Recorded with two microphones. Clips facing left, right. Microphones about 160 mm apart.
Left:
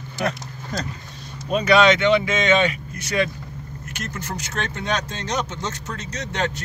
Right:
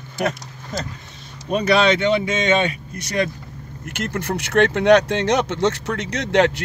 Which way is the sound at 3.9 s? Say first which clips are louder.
Right 7 dB; 60° right (ahead or behind).